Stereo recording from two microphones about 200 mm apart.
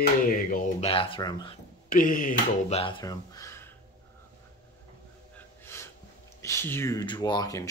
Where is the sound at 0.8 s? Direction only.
25° left (ahead or behind).